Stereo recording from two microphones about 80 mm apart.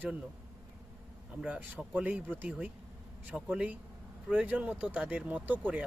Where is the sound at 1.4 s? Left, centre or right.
Centre.